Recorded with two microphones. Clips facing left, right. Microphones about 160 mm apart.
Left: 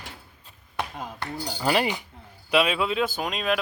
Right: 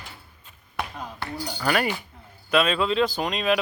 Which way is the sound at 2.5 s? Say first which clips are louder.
Right 1 dB; 10° left (ahead or behind).